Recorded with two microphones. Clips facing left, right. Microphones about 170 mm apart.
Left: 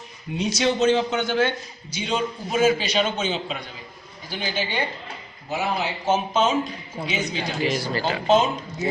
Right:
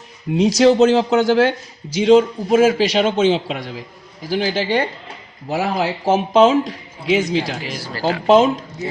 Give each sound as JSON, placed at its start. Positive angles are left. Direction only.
{"t": 0.3, "sound": "speech", "side_deg": -90}
{"t": 5.5, "sound": "speech", "side_deg": -75}
{"t": 7.6, "sound": "speech", "side_deg": -5}
{"t": 8.3, "sound": "speech", "side_deg": -90}